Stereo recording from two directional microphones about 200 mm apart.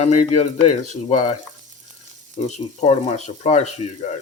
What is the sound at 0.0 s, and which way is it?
Speech, 35° left (ahead or behind).